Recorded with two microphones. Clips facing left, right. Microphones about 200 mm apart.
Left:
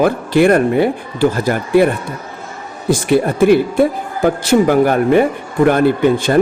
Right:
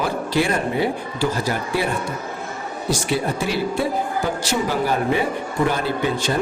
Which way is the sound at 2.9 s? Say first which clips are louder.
Left 9 dB; 55° left (ahead or behind).